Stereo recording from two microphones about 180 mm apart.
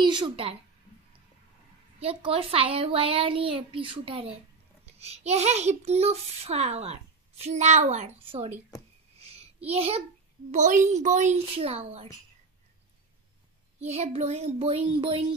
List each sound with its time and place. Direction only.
0.0 s a woman's voice: 25° right (ahead or behind)
2.0 s a child's voice: 35° right (ahead or behind)
9.2 s child singing: 35° right (ahead or behind)
10.5 s a child's voice: 45° right (ahead or behind)
13.8 s a child's voice: 35° right (ahead or behind)